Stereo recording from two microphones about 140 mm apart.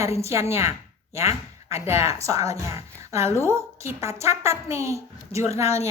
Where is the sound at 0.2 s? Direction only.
20° right (ahead or behind).